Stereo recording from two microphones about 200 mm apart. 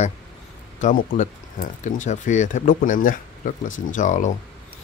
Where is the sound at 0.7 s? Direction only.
40° left (ahead or behind).